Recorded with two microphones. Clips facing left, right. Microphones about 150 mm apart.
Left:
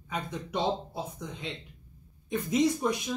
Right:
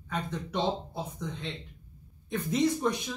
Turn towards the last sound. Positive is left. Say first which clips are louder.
# even
turn(degrees=10)  # may be behind; listen again after turning